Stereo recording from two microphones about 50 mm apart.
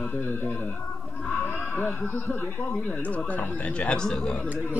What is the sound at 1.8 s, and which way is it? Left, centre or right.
Speech, left.